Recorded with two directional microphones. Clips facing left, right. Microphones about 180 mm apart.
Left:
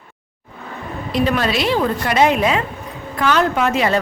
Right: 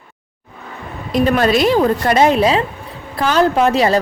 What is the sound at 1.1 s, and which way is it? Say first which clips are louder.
A woman's voice: right 4 dB; 45° right (ahead or behind).